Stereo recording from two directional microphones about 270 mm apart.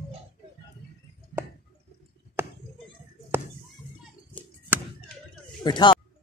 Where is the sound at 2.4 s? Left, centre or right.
Centre.